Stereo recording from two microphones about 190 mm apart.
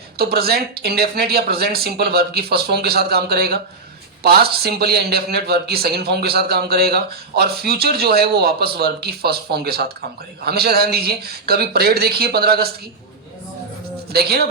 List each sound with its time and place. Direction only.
0.2 s speech: 55° right (ahead or behind)
14.1 s speech: 55° right (ahead or behind)